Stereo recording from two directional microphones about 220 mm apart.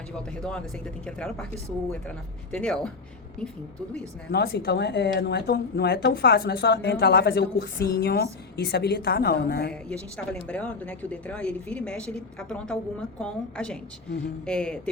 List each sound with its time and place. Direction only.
0.2 s speech: 5° left (ahead or behind)
4.3 s speech: 45° left (ahead or behind)
10.5 s speech: 5° left (ahead or behind)